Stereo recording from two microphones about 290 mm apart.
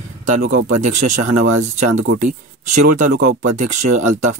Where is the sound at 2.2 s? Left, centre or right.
Right.